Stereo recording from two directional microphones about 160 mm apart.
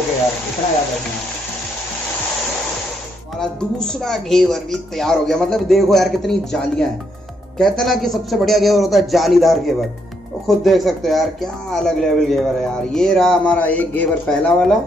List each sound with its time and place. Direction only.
3.3 s speech: 5° left (ahead or behind)